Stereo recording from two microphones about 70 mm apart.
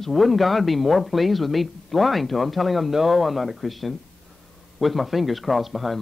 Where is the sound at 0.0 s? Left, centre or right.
Centre.